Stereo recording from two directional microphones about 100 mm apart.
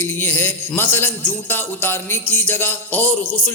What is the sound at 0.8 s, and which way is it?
A man's voice, 20° left (ahead or behind).